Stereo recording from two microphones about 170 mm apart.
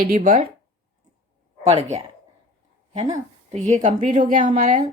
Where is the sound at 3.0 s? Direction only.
20° right (ahead or behind).